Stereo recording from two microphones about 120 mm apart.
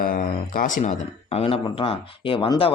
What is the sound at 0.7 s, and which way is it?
Speech, 90° left.